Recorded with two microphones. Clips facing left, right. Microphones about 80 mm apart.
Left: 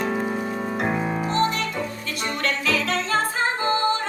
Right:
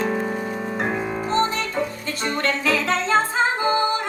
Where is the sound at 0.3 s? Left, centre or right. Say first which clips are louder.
Even; centre.